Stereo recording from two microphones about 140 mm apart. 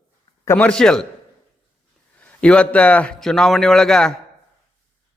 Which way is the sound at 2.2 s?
10° left (ahead or behind).